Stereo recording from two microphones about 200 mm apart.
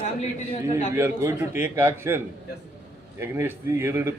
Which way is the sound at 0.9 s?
15° right (ahead or behind).